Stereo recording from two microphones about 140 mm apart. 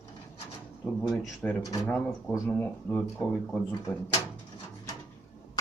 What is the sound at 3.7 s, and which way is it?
Speech, 25° left (ahead or behind).